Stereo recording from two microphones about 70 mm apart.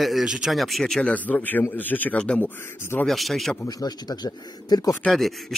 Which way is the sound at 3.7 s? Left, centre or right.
Left.